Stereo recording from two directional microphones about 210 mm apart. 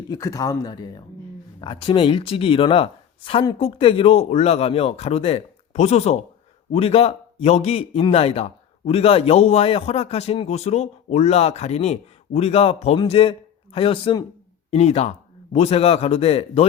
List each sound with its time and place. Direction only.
0.1 s a man's voice: 15° left (ahead or behind)